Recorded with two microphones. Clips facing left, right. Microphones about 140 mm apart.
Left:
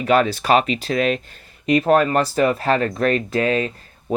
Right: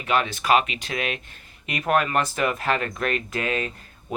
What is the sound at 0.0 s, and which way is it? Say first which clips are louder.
Speech: left 7 dB; 40° left (ahead or behind).